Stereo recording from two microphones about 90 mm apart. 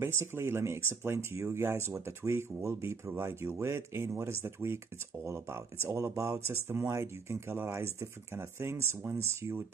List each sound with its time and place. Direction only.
0.0 s speech: 25° right (ahead or behind)